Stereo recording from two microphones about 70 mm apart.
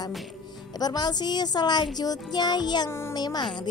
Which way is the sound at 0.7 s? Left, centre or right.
Left.